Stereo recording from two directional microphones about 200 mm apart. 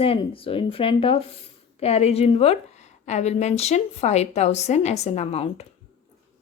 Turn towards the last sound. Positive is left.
turn(degrees=30)  # may be behind; listen again after turning